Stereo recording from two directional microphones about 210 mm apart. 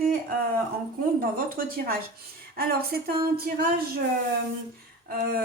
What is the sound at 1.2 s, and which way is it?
A woman's voice, 40° right (ahead or behind).